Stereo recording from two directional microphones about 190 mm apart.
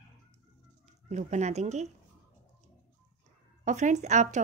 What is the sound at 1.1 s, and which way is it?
Speech, 40° right (ahead or behind).